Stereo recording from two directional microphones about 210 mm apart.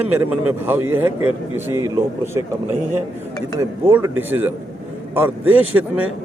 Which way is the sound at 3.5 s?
25° right (ahead or behind).